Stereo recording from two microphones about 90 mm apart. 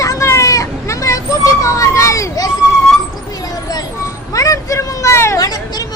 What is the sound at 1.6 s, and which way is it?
Children playing, 35° left (ahead or behind).